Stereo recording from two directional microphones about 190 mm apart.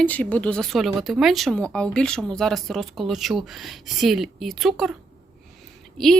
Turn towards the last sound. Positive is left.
turn(degrees=0)  # may be behind; listen again after turning